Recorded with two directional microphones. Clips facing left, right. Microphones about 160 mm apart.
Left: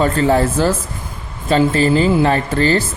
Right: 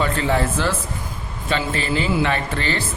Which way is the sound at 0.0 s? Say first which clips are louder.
Left 6 dB; 40° left (ahead or behind).